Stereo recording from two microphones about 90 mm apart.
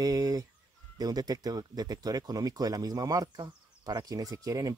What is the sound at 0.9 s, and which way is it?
Speech, 45° right (ahead or behind).